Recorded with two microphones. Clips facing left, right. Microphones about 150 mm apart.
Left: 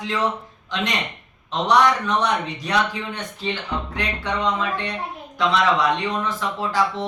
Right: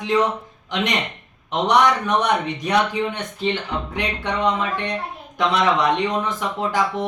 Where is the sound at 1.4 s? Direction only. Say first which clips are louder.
Right 1 dB; 20° right (ahead or behind).